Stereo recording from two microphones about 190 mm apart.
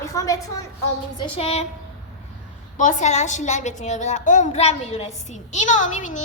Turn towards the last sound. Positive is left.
turn(degrees=40)  # may be behind; listen again after turning